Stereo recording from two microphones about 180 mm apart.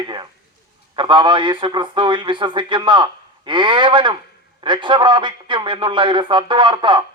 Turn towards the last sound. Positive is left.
turn(degrees=-25)  # may be behind; listen again after turning